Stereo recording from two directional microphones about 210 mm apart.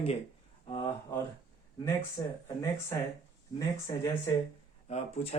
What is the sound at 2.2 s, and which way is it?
Speech, 20° left (ahead or behind).